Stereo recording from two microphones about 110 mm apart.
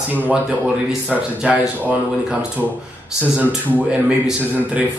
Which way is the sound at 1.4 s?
10° right (ahead or behind).